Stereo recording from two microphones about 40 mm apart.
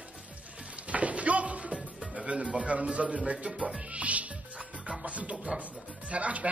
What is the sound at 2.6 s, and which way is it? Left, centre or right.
Speech, right.